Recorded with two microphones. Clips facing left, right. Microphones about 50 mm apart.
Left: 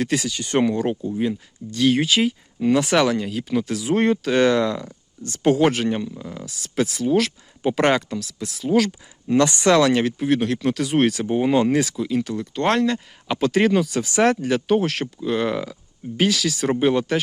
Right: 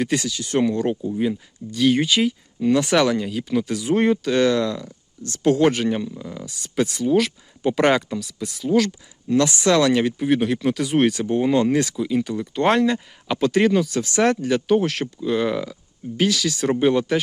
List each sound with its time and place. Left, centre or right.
0.0 s speech: centre
4.4 s speech: left
5.5 s speech: centre
9.3 s speech: left
9.7 s speech: centre
11.3 s speech: centre
13.2 s speech: centre